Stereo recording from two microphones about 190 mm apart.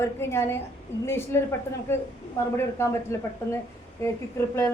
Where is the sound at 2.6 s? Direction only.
15° left (ahead or behind).